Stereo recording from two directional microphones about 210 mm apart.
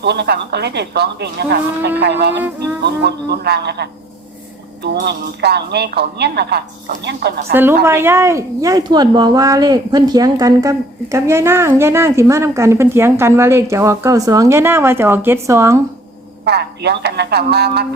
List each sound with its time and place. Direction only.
0.0 s speech: 50° right (ahead or behind)
2.4 s speech: 10° right (ahead or behind)
2.8 s speech: 50° right (ahead or behind)
7.5 s speech: 10° right (ahead or behind)
16.4 s speech: 50° right (ahead or behind)